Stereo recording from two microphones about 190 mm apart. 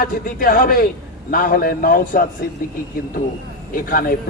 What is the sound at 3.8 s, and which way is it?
Speech, 50° left (ahead or behind).